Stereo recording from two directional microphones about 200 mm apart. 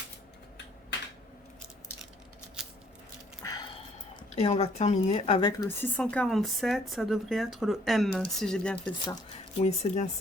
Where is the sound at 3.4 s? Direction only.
20° left (ahead or behind).